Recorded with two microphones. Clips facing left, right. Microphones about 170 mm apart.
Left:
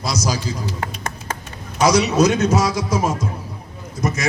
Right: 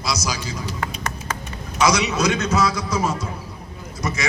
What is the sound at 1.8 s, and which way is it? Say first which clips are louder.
A man's voice: left 4 dB; 35° left (ahead or behind).